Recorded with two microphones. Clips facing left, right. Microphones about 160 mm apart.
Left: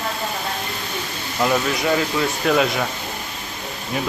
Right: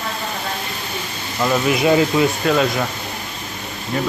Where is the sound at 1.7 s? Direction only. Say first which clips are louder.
Right 5 dB; 20° right (ahead or behind).